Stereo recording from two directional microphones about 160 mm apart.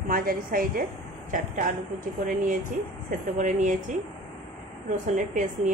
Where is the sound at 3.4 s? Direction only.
50° right (ahead or behind).